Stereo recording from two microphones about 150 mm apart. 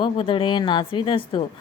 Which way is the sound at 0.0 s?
35° left (ahead or behind).